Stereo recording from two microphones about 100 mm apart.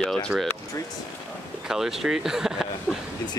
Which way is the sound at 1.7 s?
5° right (ahead or behind).